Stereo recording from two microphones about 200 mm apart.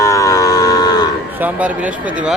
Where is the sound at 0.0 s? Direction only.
15° left (ahead or behind).